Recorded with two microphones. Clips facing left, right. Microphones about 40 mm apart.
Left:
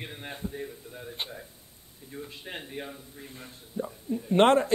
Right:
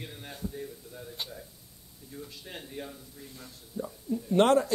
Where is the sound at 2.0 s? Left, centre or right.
Left.